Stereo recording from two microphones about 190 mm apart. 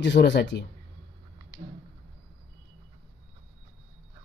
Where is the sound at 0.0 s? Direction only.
65° left (ahead or behind).